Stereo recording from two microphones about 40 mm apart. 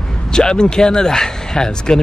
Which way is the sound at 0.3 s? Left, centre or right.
Centre.